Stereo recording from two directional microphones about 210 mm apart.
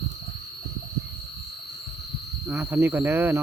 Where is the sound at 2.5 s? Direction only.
10° right (ahead or behind).